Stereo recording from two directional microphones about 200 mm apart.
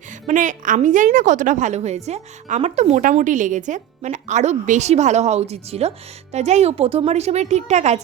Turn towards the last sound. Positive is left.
turn(degrees=-35)  # may be behind; listen again after turning